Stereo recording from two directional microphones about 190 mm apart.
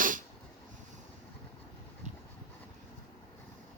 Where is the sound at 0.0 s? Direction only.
45° right (ahead or behind).